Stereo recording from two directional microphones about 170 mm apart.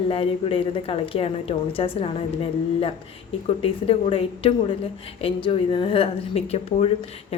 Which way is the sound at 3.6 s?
35° left (ahead or behind).